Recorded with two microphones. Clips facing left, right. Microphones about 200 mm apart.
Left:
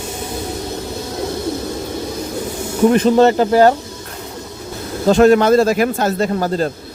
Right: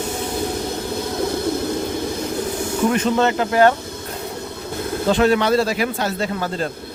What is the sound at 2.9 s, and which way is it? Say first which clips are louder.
Speech: left 8 dB; 35° left (ahead or behind).